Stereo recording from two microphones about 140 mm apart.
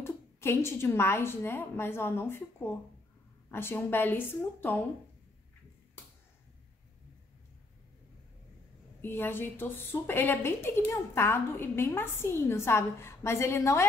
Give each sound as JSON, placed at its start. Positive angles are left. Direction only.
{"t": 0.0, "sound": "a woman's voice", "side_deg": 20}
{"t": 9.0, "sound": "a woman's voice", "side_deg": 15}